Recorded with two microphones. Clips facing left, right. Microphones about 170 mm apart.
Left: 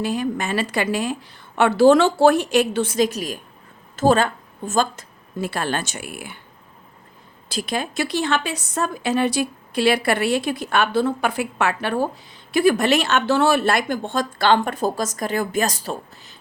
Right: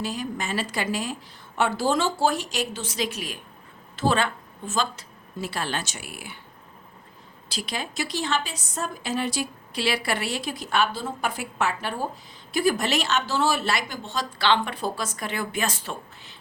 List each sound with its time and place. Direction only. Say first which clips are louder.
0.0 s a woman's voice: left 7 dB; 60° left (ahead or behind)
7.5 s a woman's voice: left 7 dB; 50° left (ahead or behind)